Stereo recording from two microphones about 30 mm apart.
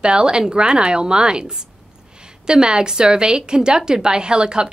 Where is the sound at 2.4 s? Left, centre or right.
Right.